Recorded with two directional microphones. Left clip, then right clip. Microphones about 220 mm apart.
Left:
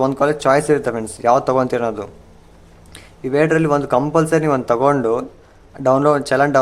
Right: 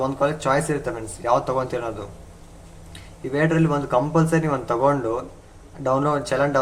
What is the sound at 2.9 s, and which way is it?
Speech, 50° left (ahead or behind).